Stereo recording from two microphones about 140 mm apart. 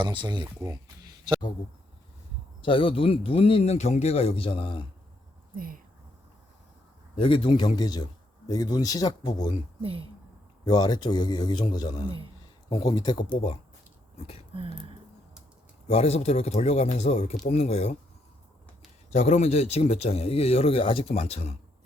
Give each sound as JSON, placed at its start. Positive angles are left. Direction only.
{"t": 0.0, "sound": "speech", "side_deg": -35}
{"t": 2.6, "sound": "speech", "side_deg": 40}
{"t": 5.5, "sound": "speech", "side_deg": -90}
{"t": 7.2, "sound": "speech", "side_deg": 35}
{"t": 9.8, "sound": "speech", "side_deg": -45}
{"t": 10.7, "sound": "speech", "side_deg": 30}
{"t": 14.5, "sound": "speech", "side_deg": -40}
{"t": 15.9, "sound": "speech", "side_deg": 50}
{"t": 19.1, "sound": "speech", "side_deg": 50}